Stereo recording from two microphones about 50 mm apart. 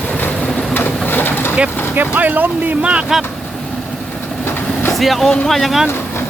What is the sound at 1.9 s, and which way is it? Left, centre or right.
Speech, right.